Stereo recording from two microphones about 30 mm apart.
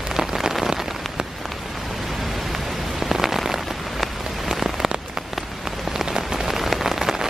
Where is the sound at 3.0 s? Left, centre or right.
Centre.